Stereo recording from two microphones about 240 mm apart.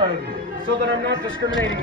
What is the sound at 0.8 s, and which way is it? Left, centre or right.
Speech, right.